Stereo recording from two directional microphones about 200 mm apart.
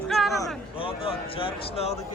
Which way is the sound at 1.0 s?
30° left (ahead or behind).